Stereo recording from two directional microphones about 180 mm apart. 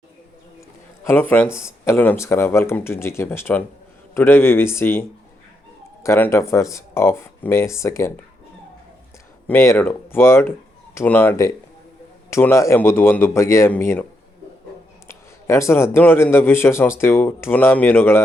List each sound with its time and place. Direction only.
1.0 s a man's voice: 10° left (ahead or behind)
9.5 s a man's voice: 10° left (ahead or behind)
15.0 s a man's voice: 15° left (ahead or behind)